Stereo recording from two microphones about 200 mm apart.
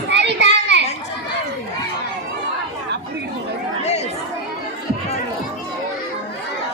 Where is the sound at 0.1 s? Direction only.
60° right (ahead or behind).